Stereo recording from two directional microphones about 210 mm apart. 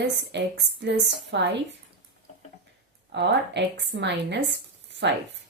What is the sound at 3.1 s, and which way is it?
A woman's voice, 55° right (ahead or behind).